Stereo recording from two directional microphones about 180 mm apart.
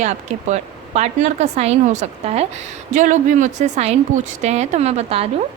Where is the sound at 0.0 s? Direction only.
40° right (ahead or behind).